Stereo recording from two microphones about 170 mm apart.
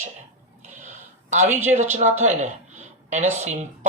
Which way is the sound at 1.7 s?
40° right (ahead or behind).